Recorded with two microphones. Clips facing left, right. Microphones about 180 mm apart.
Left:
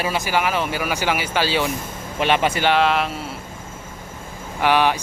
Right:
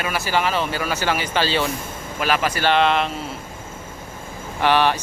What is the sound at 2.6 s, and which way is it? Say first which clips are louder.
Speech: right 2 dB; 5° left (ahead or behind).